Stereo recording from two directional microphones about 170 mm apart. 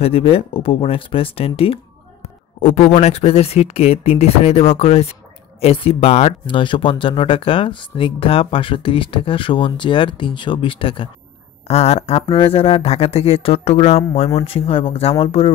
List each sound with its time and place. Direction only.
0.0 s speech: 35° left (ahead or behind)